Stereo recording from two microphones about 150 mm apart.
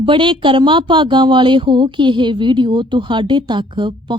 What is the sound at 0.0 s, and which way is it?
Speech, 35° right (ahead or behind).